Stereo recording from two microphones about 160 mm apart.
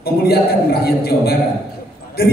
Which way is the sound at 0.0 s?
75° left (ahead or behind).